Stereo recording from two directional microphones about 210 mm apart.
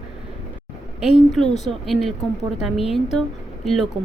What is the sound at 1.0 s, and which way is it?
Speech, centre (ahead or behind).